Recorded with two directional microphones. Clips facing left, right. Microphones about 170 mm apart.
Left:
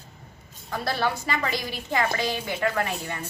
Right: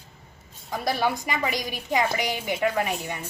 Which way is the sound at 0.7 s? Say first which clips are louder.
Right 1 dB; 15° right (ahead or behind).